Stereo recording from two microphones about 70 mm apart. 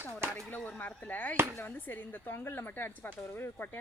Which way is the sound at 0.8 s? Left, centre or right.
Left.